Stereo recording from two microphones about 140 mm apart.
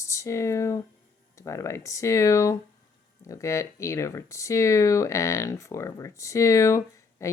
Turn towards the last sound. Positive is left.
turn(degrees=20)  # may be behind; listen again after turning